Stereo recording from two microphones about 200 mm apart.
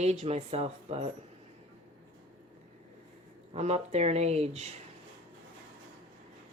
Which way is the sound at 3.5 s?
35° right (ahead or behind).